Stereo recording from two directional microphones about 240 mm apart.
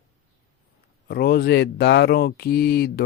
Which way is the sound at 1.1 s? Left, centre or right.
Left.